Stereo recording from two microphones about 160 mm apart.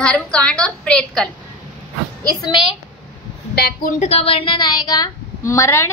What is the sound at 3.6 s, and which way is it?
Speech, 80° left.